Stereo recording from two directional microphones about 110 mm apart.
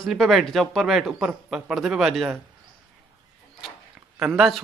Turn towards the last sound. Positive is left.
turn(degrees=-5)  # may be behind; listen again after turning